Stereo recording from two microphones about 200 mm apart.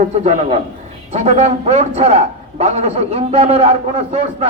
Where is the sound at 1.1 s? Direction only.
30° right (ahead or behind).